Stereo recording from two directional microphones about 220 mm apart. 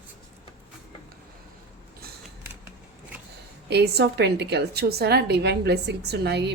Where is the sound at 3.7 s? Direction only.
50° right (ahead or behind).